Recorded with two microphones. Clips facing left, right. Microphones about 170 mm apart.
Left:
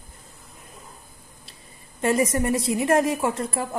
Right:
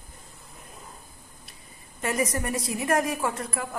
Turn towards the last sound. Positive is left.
turn(degrees=30)  # may be behind; listen again after turning